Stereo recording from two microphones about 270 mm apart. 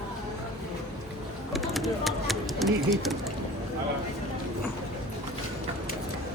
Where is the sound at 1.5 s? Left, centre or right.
Centre.